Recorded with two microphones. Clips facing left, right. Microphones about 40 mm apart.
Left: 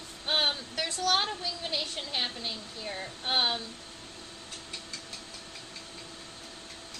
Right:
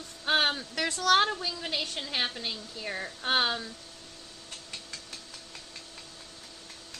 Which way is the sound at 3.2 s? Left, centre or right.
Right.